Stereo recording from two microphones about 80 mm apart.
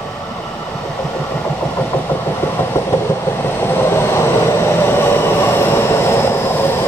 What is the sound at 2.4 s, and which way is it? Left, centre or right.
Train, left.